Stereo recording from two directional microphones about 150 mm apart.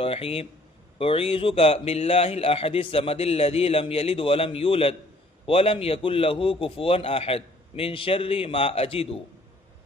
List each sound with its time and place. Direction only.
0.0 s a man's voice: 40° left (ahead or behind)